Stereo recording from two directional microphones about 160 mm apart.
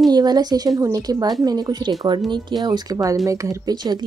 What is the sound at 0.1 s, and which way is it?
Speech, 25° right (ahead or behind).